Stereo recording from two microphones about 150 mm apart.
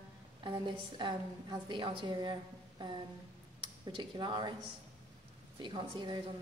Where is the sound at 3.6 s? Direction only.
30° right (ahead or behind).